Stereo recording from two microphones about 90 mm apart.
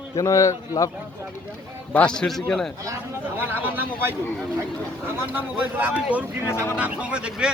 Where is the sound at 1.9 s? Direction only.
10° left (ahead or behind).